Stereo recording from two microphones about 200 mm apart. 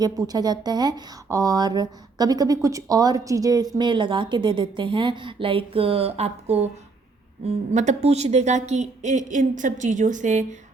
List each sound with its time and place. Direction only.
0.0 s a woman's voice: 20° right (ahead or behind); by 10.4 s 40° right (ahead or behind)